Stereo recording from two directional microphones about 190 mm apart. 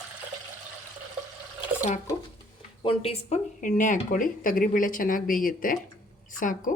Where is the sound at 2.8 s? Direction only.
30° left (ahead or behind).